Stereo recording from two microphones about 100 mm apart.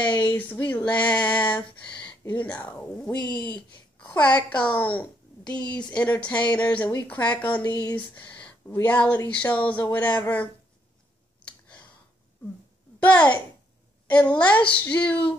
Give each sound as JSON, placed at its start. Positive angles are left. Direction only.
{"t": 0.2, "sound": "female singing", "side_deg": 15}
{"t": 1.9, "sound": "a sound", "side_deg": 50}
{"t": 2.2, "sound": "speech", "side_deg": 15}
{"t": 7.6, "sound": "speech", "side_deg": 45}
{"t": 8.8, "sound": "speech", "side_deg": 15}
{"t": 13.0, "sound": "speech", "side_deg": 15}